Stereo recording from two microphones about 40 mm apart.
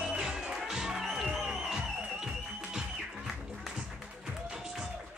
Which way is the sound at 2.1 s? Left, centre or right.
Centre.